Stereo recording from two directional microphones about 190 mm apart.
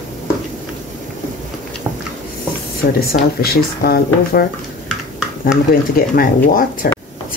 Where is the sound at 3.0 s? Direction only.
55° left (ahead or behind).